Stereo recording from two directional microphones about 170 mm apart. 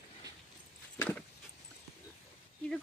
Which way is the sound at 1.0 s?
10° left (ahead or behind).